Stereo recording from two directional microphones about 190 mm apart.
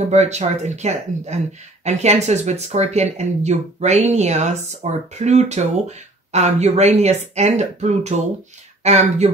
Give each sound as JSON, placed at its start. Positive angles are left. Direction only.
{"t": 0.1, "sound": "speech", "side_deg": -35}